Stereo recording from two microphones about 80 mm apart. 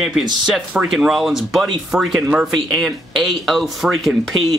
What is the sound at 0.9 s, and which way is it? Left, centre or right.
Speech, centre.